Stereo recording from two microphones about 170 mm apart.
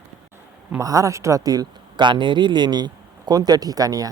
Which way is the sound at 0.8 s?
20° right (ahead or behind).